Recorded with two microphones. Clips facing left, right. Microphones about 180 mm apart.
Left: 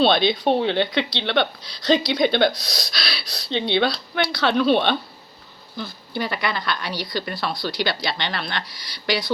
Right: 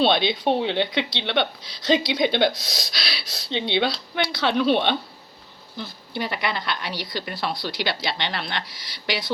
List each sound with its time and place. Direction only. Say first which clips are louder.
0.0 s speech: left 2 dB; 15° right (ahead or behind)